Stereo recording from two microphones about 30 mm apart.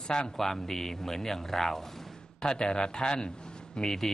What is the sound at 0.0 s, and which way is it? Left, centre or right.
Speech, left.